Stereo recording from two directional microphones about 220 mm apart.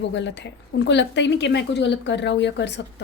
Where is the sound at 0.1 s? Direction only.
55° left (ahead or behind).